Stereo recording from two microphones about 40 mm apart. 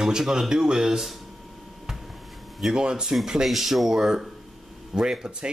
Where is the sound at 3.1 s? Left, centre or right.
Centre.